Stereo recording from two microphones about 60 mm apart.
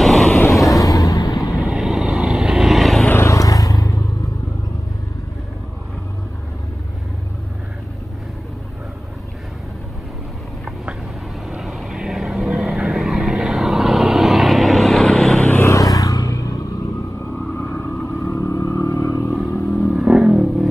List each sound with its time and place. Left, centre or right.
0.0 s vehicle: centre
0.7 s vehicle: left
1.6 s vehicle: centre
3.3 s vehicle: left
11.5 s vehicle: centre
15.6 s vehicle: left
17.6 s vehicle: left
18.0 s vehicle: left
19.7 s vehicle: centre